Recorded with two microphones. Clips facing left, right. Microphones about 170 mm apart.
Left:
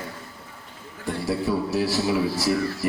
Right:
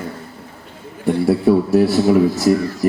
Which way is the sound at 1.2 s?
55° right (ahead or behind).